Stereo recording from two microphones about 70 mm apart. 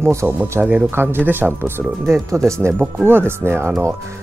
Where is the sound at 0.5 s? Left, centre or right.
Right.